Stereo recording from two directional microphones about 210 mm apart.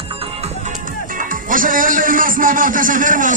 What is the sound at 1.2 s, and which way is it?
Music, 40° right (ahead or behind).